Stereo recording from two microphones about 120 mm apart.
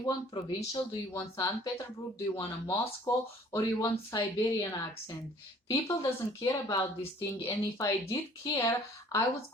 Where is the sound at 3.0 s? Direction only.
25° left (ahead or behind).